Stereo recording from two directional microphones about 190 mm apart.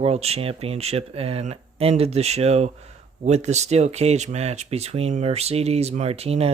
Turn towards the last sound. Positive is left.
turn(degrees=-35)  # may be behind; listen again after turning